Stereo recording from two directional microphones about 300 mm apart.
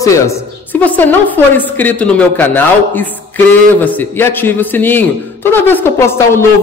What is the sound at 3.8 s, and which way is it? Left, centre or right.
A woman's voice, centre.